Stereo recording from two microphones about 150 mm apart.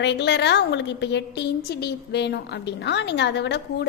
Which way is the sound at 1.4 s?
90° left.